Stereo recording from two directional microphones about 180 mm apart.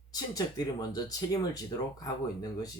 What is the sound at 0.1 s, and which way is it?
Speech, 20° left (ahead or behind).